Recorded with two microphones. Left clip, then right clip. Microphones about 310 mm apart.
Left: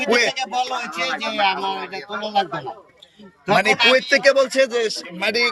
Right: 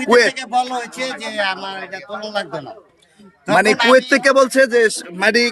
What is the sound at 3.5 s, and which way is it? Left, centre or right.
A man's voice, centre.